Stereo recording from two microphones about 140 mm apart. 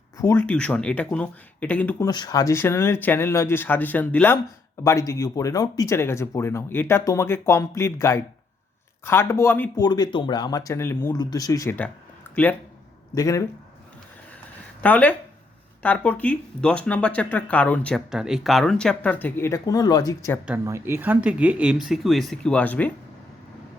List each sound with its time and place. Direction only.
0.2 s speech: 20° left (ahead or behind)
2.0 s speech: 30° left (ahead or behind)
9.8 s speech: 30° left (ahead or behind)
12.3 s speech: 10° left (ahead or behind)
13.1 s speech: 25° left (ahead or behind)
14.8 s speech: 10° left (ahead or behind)
18.1 s speech: 5° right (ahead or behind); by 20.3 s 25° left (ahead or behind)
20.7 s speech: 20° right (ahead or behind); by 22.9 s 10° left (ahead or behind)